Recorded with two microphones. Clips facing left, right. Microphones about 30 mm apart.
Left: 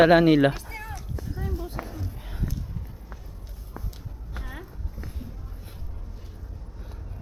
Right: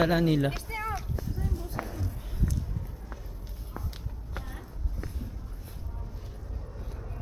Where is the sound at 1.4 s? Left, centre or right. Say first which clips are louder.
Left 5 dB; centre.